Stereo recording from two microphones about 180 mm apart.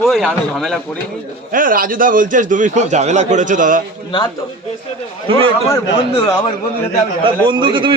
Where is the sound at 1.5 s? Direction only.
50° right (ahead or behind).